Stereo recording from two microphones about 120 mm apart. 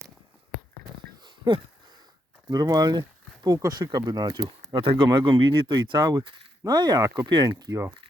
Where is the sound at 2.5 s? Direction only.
35° right (ahead or behind).